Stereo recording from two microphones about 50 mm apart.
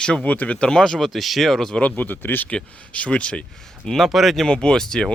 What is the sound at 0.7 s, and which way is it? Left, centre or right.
Speech, centre.